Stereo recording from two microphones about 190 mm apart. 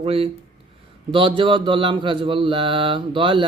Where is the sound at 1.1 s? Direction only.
25° right (ahead or behind).